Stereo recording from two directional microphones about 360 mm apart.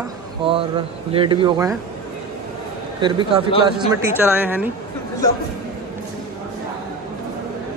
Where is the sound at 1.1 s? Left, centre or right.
Centre.